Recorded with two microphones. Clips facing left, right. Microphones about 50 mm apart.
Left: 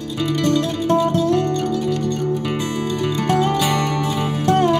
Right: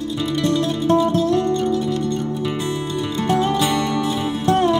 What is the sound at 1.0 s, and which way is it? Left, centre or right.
Music, left.